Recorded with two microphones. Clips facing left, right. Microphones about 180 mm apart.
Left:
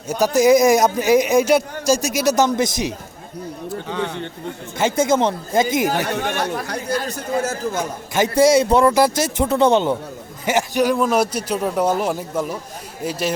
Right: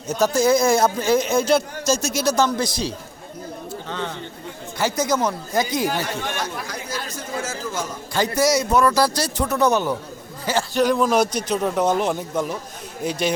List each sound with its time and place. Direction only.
0.1 s a man's voice: 15° left (ahead or behind)
4.8 s a man's voice: 25° left (ahead or behind)
5.9 s a man's voice: 65° left (ahead or behind)
8.1 s a man's voice: 25° left (ahead or behind); by 13.3 s 5° left (ahead or behind)